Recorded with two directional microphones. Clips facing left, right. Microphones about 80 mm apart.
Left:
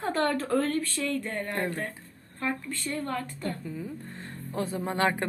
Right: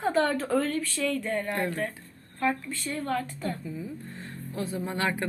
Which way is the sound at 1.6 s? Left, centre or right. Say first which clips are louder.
Right 2 dB; left.